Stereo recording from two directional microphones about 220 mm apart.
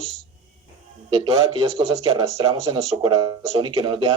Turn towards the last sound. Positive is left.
turn(degrees=-20)  # may be behind; listen again after turning